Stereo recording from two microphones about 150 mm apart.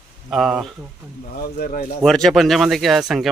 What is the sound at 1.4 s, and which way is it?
Speech, 70° left (ahead or behind).